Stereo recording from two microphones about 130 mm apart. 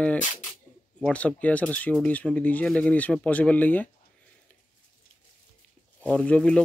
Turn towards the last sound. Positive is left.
turn(degrees=10)  # may be behind; listen again after turning